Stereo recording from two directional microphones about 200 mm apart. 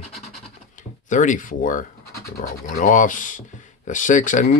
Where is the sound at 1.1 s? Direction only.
40° left (ahead or behind).